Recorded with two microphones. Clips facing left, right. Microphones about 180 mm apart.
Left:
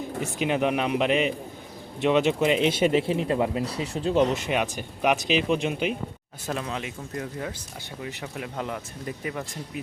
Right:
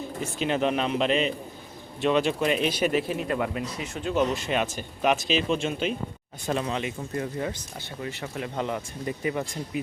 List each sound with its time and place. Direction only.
0.2 s speech: 15° left (ahead or behind); by 4.3 s 30° left (ahead or behind)
4.4 s speech: 15° left (ahead or behind)
6.4 s speech: centre (ahead or behind)